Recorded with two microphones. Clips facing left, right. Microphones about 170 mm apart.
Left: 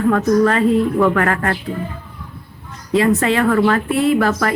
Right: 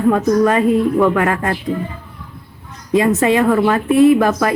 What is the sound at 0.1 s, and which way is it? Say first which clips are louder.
A woman's voice: right 1 dB; 15° right (ahead or behind).